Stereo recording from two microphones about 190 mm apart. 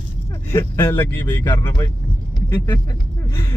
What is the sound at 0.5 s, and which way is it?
Speech, 15° left (ahead or behind).